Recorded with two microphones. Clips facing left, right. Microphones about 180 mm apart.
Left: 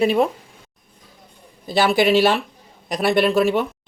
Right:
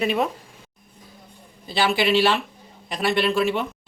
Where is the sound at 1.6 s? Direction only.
40° left (ahead or behind).